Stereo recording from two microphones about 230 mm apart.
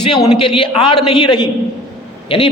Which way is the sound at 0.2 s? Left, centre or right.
Left.